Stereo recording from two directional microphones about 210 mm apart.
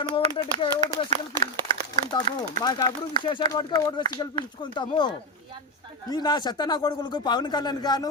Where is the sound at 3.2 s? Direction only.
20° left (ahead or behind).